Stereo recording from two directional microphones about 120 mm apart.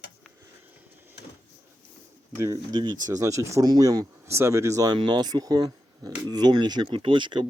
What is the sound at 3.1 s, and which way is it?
Speech, 25° right (ahead or behind).